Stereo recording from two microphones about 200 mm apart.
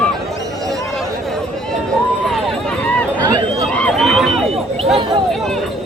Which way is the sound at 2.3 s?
Centre (ahead or behind).